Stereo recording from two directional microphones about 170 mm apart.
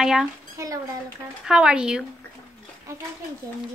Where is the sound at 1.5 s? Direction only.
5° right (ahead or behind).